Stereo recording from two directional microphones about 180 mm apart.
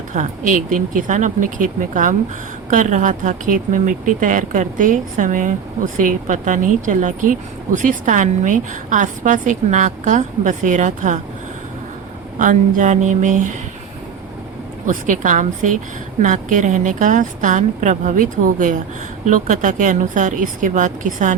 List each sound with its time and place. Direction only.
0.1 s speech: 45° right (ahead or behind)
12.4 s speech: 45° right (ahead or behind)
14.8 s speech: 45° right (ahead or behind)